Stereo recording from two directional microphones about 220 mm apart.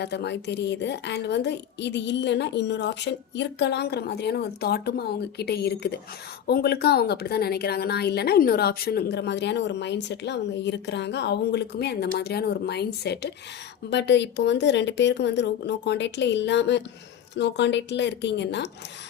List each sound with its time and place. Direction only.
0.0 s a woman's voice: 50° left (ahead or behind)